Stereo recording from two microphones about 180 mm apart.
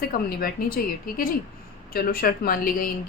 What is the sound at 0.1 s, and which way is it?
A woman's voice, 55° left (ahead or behind).